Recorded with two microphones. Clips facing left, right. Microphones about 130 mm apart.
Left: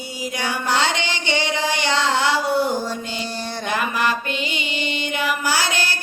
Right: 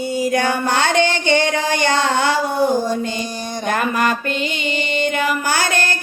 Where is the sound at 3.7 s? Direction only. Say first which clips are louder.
Right 4 dB; 45° right (ahead or behind).